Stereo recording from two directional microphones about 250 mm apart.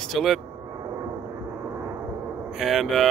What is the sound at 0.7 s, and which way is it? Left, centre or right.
Vehicle, centre.